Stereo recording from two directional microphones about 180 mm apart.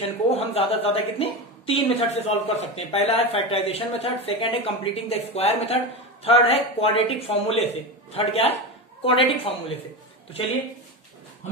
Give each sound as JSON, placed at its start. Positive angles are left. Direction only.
{"t": 0.0, "sound": "a woman's voice", "side_deg": 35}